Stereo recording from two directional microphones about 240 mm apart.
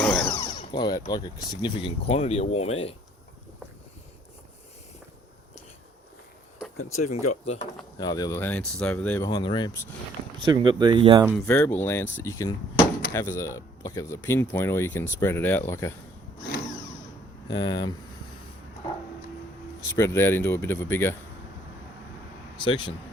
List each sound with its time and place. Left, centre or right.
0.0 s a sound: centre
0.3 s speech: centre
6.9 s speech: left
7.4 s speech: left
10.4 s speech: centre
11.3 s speech: centre
17.5 s speech: centre
19.8 s speech: centre
22.6 s speech: left